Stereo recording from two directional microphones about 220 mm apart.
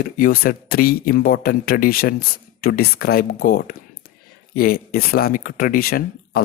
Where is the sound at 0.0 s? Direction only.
40° left (ahead or behind).